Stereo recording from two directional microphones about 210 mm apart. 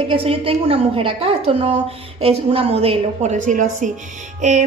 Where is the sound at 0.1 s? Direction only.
25° right (ahead or behind).